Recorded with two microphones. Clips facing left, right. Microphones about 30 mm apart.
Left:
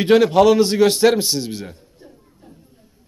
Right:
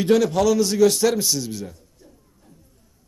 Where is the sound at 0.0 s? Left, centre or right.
Left.